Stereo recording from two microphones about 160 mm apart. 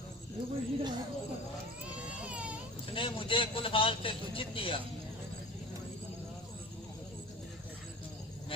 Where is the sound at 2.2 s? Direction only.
5° right (ahead or behind).